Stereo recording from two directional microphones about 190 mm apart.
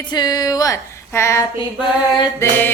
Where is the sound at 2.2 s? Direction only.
10° left (ahead or behind).